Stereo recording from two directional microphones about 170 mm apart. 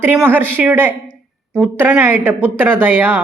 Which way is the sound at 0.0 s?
10° right (ahead or behind).